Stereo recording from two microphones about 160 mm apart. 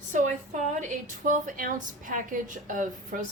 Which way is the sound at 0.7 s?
50° right (ahead or behind).